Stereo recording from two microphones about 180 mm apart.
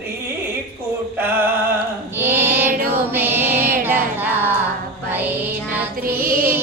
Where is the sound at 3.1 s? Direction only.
10° right (ahead or behind).